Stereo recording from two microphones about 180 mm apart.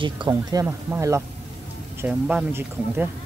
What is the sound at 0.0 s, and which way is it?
Speech, 25° right (ahead or behind).